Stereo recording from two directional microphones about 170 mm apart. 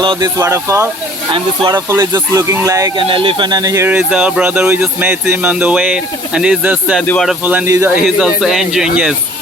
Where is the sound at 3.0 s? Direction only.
30° right (ahead or behind); by 7.0 s 5° right (ahead or behind).